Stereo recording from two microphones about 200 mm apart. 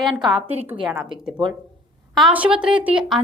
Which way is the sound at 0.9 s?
5° right (ahead or behind).